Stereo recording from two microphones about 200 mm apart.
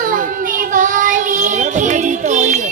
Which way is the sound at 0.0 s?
45° right (ahead or behind).